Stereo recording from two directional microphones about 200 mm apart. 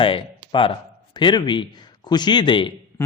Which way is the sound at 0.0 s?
25° left (ahead or behind).